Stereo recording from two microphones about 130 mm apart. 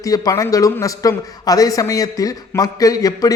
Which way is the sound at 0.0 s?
25° left (ahead or behind).